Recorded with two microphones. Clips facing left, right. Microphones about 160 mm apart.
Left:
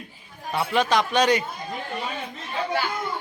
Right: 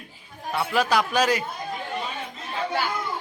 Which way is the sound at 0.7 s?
5° right (ahead or behind).